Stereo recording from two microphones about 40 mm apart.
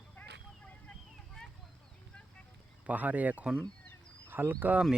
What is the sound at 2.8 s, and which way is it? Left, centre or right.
Speech, right.